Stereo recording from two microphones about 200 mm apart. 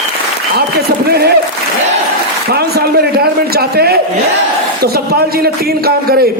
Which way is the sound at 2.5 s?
50° right (ahead or behind).